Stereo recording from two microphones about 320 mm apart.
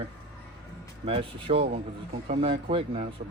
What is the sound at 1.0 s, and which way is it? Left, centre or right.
Speech, centre.